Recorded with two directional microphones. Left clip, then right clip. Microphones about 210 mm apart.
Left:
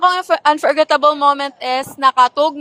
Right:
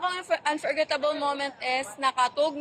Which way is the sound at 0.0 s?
55° left (ahead or behind).